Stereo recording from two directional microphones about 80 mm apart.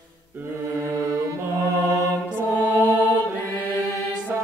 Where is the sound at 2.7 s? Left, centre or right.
Right.